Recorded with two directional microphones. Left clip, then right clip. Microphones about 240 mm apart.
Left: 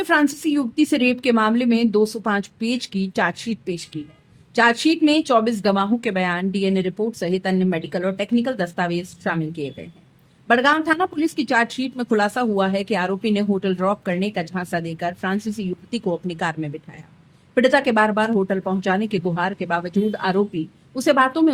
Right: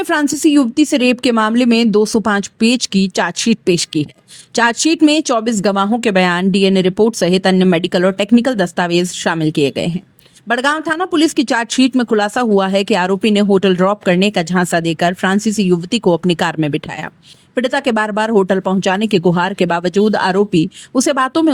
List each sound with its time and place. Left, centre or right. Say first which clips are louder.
0.0 s speech: right 4 dB; right